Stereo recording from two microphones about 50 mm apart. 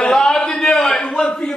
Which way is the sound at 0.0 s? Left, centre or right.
Centre.